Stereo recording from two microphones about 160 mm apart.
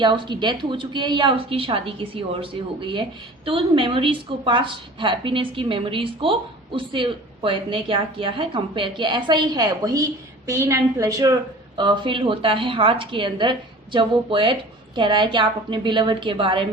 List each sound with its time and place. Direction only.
0.0 s a woman's voice: 30° right (ahead or behind)
11.8 s a woman's voice: 30° right (ahead or behind)